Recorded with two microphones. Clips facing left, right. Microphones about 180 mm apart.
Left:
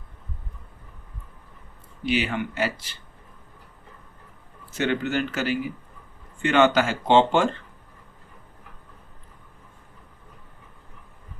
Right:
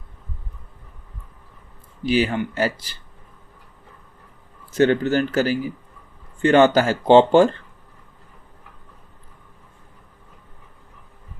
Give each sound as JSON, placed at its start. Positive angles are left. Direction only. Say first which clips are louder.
{"t": 2.0, "sound": "speech", "louder": "right 5 dB", "side_deg": -40}
{"t": 4.8, "sound": "speech", "louder": "right 7 dB", "side_deg": -40}